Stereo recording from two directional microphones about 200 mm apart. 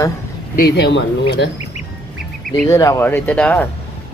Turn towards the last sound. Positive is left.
turn(degrees=5)  # may be behind; listen again after turning